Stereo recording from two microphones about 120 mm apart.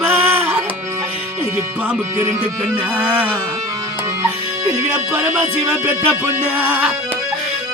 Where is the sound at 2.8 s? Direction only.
15° right (ahead or behind).